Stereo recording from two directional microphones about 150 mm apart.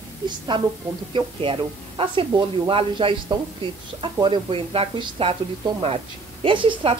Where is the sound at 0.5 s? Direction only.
30° right (ahead or behind).